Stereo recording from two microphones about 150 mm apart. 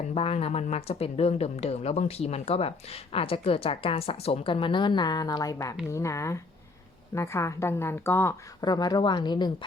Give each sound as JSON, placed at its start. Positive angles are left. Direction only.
{"t": 0.1, "sound": "a woman's voice", "side_deg": 40}
{"t": 8.6, "sound": "a woman's voice", "side_deg": 25}